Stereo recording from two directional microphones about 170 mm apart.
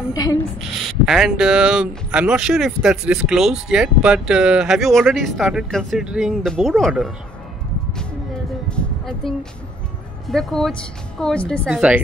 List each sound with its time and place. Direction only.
0.1 s a woman's voice: 20° left (ahead or behind)
0.8 s speech: centre (ahead or behind)
8.6 s music: 5° left (ahead or behind)
10.2 s speech: centre (ahead or behind)
11.7 s speech: 5° right (ahead or behind)